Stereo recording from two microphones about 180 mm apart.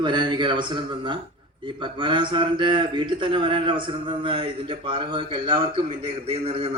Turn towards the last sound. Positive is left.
turn(degrees=-30)  # may be behind; listen again after turning